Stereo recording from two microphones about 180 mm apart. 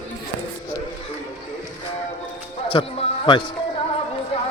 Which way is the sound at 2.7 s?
30° left (ahead or behind).